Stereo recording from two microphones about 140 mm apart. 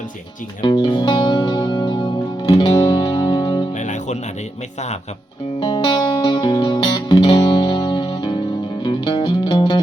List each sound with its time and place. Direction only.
0.6 s music: 35° left (ahead or behind)
3.8 s music: 60° left (ahead or behind)
5.5 s music: 30° left (ahead or behind)